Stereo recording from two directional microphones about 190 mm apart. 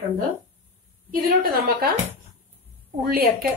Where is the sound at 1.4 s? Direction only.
50° right (ahead or behind).